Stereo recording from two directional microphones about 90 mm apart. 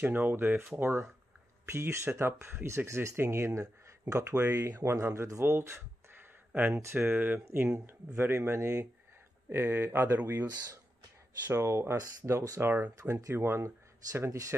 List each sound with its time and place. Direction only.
0.0 s speech: 20° right (ahead or behind)
4.4 s speech: 20° right (ahead or behind)
4.6 s speech: 40° right (ahead or behind)
9.5 s speech: 25° right (ahead or behind)
11.5 s speech: 30° right (ahead or behind)